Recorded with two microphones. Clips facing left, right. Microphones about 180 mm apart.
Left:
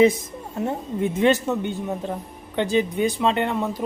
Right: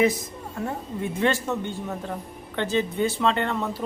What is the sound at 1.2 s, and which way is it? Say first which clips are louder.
Speech: left 4 dB; 15° left (ahead or behind).